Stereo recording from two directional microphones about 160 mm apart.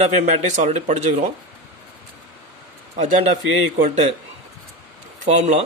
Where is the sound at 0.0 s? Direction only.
45° right (ahead or behind).